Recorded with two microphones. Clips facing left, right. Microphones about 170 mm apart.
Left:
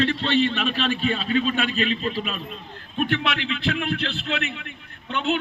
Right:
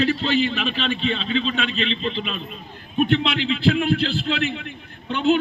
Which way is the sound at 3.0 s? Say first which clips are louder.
Right 4 dB; 25° right (ahead or behind).